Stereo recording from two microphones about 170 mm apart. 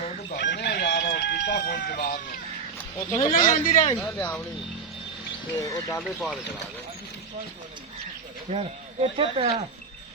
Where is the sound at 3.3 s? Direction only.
50° left (ahead or behind).